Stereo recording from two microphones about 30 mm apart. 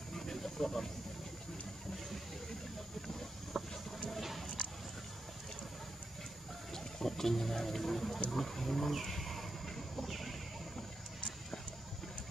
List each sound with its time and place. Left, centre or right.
0.1 s snake: centre
3.5 s vehicle: centre
4.2 s a sound: centre
6.7 s speech: centre
8.9 s vehicle: centre
9.9 s a sound: centre